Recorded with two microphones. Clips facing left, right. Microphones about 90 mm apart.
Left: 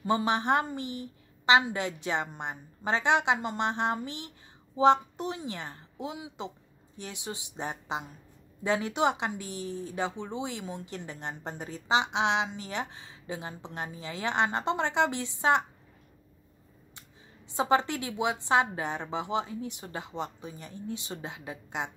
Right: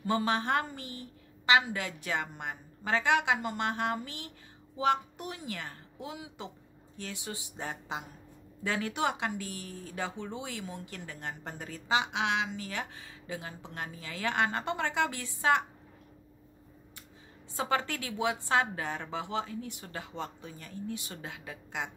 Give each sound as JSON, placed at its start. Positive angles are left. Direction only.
{"t": 0.0, "sound": "speech", "side_deg": 20}
{"t": 17.6, "sound": "speech", "side_deg": 20}